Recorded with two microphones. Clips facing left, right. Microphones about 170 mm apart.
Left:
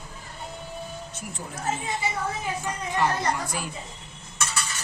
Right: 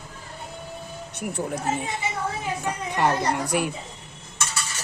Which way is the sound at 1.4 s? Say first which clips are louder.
Right 12 dB; 55° right (ahead or behind).